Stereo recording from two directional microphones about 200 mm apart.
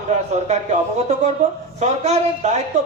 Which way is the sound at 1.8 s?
35° right (ahead or behind).